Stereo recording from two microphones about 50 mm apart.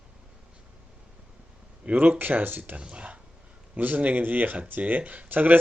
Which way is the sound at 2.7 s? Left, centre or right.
Right.